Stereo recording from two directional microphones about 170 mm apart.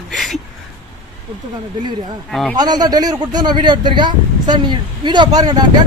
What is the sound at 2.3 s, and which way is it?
Speech, centre (ahead or behind).